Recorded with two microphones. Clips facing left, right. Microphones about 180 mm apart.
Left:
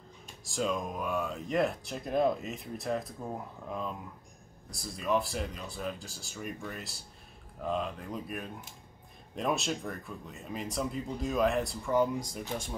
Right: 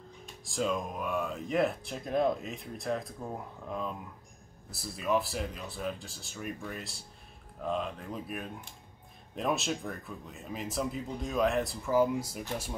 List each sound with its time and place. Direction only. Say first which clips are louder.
0.5 s speech: even; centre (ahead or behind)